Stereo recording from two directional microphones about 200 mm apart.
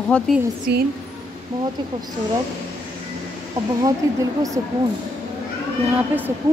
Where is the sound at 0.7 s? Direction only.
55° right (ahead or behind).